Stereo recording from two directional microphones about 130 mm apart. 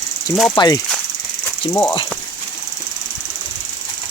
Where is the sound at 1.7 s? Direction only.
15° left (ahead or behind).